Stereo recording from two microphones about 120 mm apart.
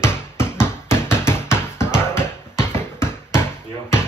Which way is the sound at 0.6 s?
20° left (ahead or behind).